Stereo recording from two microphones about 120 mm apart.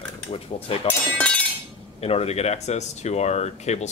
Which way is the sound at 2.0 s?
60° left (ahead or behind).